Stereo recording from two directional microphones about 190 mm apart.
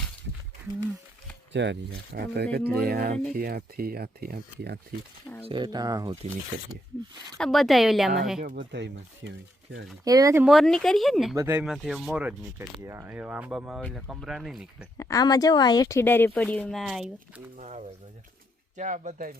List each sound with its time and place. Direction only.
1.5 s speech: 65° right (ahead or behind)
5.5 s speech: 25° right (ahead or behind)
7.3 s speech: centre (ahead or behind)
8.4 s speech: 45° right (ahead or behind)
8.7 s speech: 65° right (ahead or behind)
10.0 s speech: 20° right (ahead or behind)
10.4 s speech: centre (ahead or behind)
11.3 s speech: 10° right (ahead or behind)
14.9 s speech: 15° left (ahead or behind); by 17.4 s centre (ahead or behind)
17.6 s speech: 35° right (ahead or behind)